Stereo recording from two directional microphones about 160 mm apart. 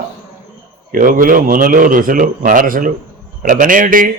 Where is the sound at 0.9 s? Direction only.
60° right (ahead or behind).